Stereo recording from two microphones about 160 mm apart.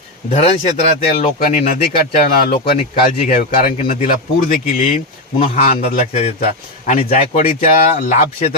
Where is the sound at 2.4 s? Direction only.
70° left (ahead or behind).